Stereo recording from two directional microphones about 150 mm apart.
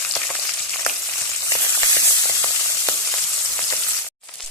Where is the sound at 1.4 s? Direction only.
20° left (ahead or behind).